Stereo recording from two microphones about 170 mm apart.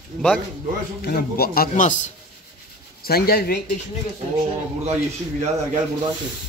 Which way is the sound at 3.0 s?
65° left (ahead or behind).